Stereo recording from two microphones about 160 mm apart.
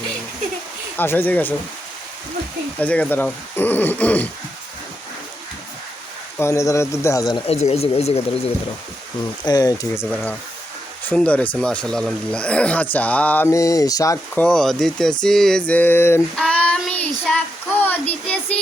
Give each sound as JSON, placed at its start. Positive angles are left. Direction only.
{"t": 0.9, "sound": "speech", "side_deg": 15}
{"t": 2.8, "sound": "speech", "side_deg": 10}
{"t": 6.4, "sound": "speech", "side_deg": 20}
{"t": 7.4, "sound": "speech", "side_deg": 40}
{"t": 9.5, "sound": "speech", "side_deg": 25}
{"t": 14.4, "sound": "speech", "side_deg": 5}
{"t": 16.4, "sound": "child singing", "side_deg": 5}